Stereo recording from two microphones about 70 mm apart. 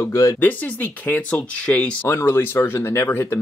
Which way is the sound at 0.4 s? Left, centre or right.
Left.